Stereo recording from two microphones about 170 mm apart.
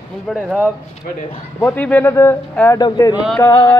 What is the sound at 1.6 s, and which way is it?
Speech, 10° left (ahead or behind).